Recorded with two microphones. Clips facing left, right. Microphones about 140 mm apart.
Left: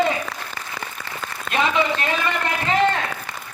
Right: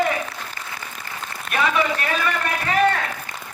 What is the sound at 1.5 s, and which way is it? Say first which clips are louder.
A man's voice: left 1 dB; 20° left (ahead or behind).